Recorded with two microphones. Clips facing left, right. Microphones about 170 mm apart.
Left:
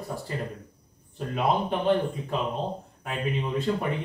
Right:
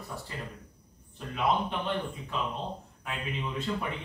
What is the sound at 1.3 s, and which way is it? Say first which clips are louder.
A man's voice: left 3 dB; 40° left (ahead or behind).